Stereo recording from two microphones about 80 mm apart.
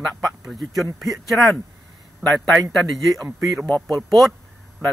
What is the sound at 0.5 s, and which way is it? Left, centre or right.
Speech, centre.